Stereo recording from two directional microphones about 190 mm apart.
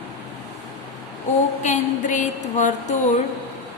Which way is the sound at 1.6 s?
40° left (ahead or behind).